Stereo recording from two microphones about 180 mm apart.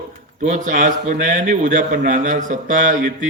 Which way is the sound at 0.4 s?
45° right (ahead or behind).